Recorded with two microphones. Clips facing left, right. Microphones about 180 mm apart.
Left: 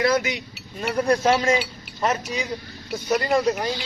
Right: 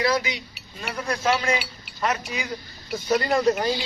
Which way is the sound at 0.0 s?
45° left (ahead or behind).